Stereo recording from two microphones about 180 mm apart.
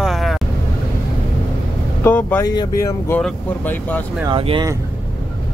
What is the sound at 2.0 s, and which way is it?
Speech, 10° left (ahead or behind).